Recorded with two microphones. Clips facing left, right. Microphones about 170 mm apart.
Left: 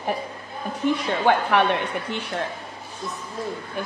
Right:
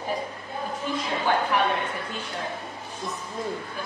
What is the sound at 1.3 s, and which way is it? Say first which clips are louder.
Speech: left 5 dB; 70° left (ahead or behind).